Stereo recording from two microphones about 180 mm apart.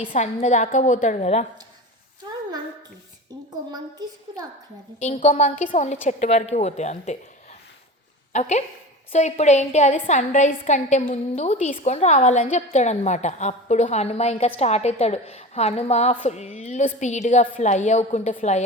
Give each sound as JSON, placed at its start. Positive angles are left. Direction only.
{"t": 0.3, "sound": "a woman's voice", "side_deg": 40}
{"t": 3.7, "sound": "a woman's voice", "side_deg": -20}
{"t": 4.9, "sound": "a woman's voice", "side_deg": 40}
{"t": 8.3, "sound": "a woman's voice", "side_deg": 40}